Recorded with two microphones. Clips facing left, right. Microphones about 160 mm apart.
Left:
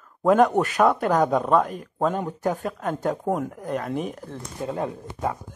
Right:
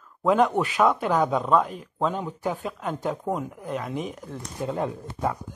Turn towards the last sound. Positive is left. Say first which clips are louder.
# even
turn(degrees=20)  # may be behind; listen again after turning